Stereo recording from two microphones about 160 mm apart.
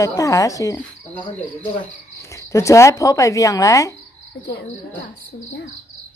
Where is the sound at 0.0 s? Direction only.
20° left (ahead or behind).